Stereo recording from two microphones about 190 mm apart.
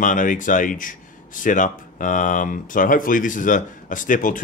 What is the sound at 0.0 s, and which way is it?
Speech, 45° left (ahead or behind).